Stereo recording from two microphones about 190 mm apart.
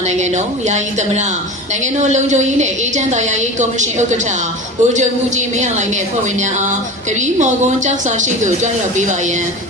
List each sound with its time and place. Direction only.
0.1 s a woman's voice: 40° right (ahead or behind)